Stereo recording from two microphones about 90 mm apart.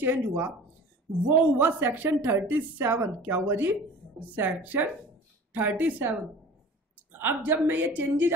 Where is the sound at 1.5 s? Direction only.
20° right (ahead or behind).